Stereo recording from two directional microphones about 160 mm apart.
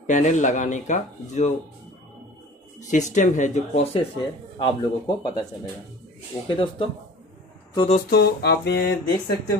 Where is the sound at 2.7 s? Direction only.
50° left (ahead or behind); by 5.3 s 30° left (ahead or behind).